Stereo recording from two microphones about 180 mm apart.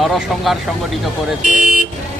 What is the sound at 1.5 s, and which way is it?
Vehicle, 45° right (ahead or behind).